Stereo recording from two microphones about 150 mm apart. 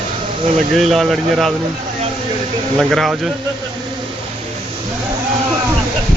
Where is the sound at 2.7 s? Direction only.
Centre (ahead or behind).